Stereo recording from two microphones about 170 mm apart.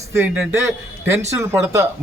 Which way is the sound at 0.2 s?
15° right (ahead or behind).